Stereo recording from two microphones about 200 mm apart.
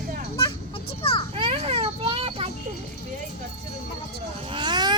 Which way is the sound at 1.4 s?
30° right (ahead or behind).